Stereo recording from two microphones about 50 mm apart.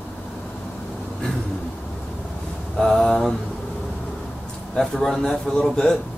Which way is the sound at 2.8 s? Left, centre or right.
Centre.